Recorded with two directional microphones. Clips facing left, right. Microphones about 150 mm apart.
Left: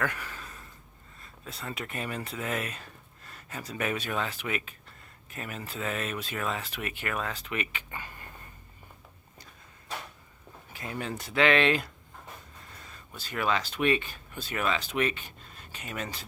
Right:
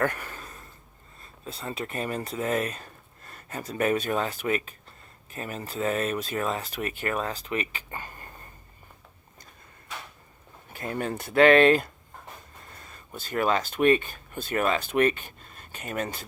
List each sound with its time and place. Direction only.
0.0 s a sound: 45° right (ahead or behind)
1.2 s speech: 30° right (ahead or behind)
10.7 s speech: 50° right (ahead or behind)